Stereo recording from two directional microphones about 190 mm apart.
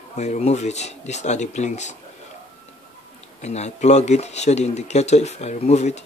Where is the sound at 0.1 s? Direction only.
35° left (ahead or behind).